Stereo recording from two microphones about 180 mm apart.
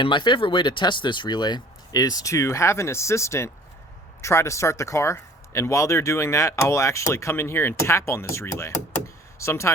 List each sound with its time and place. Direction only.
0.0 s speech: 25° left (ahead or behind)